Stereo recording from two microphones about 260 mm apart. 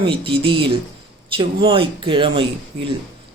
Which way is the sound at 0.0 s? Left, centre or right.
Centre.